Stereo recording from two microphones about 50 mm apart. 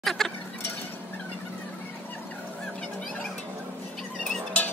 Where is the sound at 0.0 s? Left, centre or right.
Centre.